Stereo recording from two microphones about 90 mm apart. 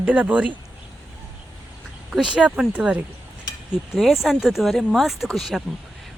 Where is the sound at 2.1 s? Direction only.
10° right (ahead or behind).